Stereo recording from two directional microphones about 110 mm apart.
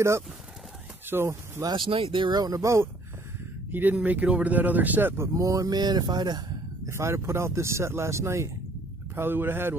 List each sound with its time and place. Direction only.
1.0 s speech: 20° right (ahead or behind)
1.7 s speech: 50° right (ahead or behind); by 2.9 s 25° right (ahead or behind)
3.7 s speech: 15° right (ahead or behind); by 6.4 s 40° right (ahead or behind)
6.9 s speech: 25° right (ahead or behind)